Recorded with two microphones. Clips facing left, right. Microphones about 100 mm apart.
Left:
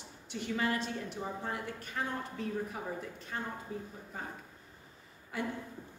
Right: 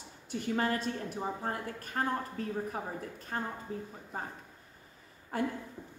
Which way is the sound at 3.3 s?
45° right (ahead or behind).